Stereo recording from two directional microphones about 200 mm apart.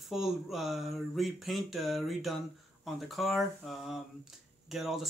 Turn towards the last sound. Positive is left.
turn(degrees=0)  # may be behind; listen again after turning